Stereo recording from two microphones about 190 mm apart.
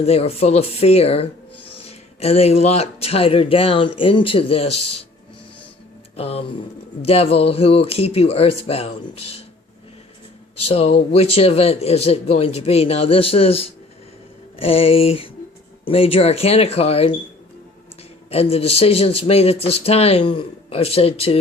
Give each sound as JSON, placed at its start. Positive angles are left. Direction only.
{"t": 0.0, "sound": "speech", "side_deg": 35}
{"t": 6.1, "sound": "speech", "side_deg": 30}
{"t": 10.6, "sound": "speech", "side_deg": 30}
{"t": 18.3, "sound": "speech", "side_deg": 30}